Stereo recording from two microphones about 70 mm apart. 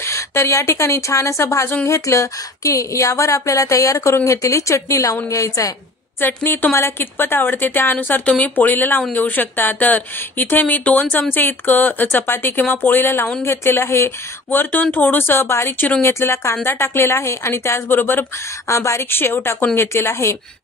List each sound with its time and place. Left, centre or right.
0.0 s speech: left
6.2 s speech: left
18.7 s speech: left